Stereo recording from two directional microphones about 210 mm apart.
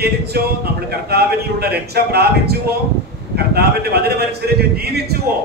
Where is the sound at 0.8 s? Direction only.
50° right (ahead or behind).